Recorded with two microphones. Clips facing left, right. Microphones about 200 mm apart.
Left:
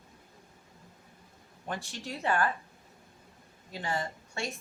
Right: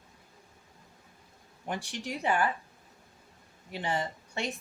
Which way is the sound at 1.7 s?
15° right (ahead or behind).